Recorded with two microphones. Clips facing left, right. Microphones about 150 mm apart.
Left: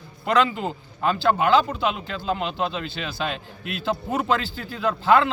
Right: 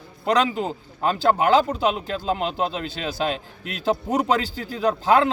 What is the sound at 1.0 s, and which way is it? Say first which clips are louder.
Speech: right 1 dB; 40° right (ahead or behind).